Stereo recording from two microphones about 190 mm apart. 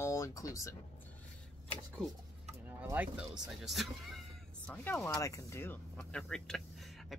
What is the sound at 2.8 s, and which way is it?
Speech, 10° right (ahead or behind).